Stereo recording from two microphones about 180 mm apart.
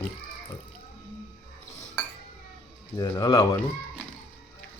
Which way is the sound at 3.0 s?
20° left (ahead or behind).